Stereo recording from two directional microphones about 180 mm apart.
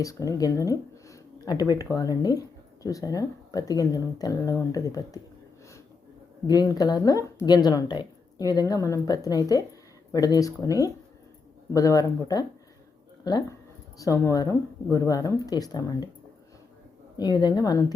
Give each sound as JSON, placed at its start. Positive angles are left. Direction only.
{"t": 0.0, "sound": "speech", "side_deg": 15}
{"t": 6.5, "sound": "speech", "side_deg": 20}
{"t": 17.2, "sound": "speech", "side_deg": 25}